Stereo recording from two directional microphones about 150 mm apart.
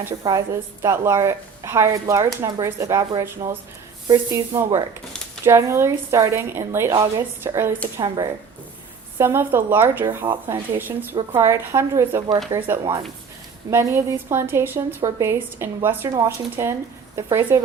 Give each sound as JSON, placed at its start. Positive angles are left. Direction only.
{"t": 0.0, "sound": "a woman's voice", "side_deg": -25}
{"t": 7.9, "sound": "a woman's voice", "side_deg": -25}
{"t": 9.1, "sound": "a woman's voice", "side_deg": -15}